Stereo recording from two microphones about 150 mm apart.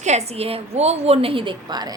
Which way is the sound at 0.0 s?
45° right (ahead or behind).